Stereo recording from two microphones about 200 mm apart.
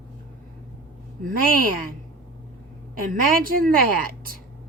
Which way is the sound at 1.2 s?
45° right (ahead or behind).